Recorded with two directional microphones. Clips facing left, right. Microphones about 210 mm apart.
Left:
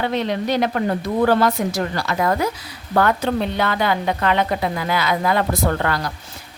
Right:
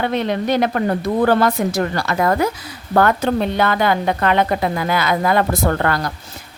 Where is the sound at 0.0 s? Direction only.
55° right (ahead or behind).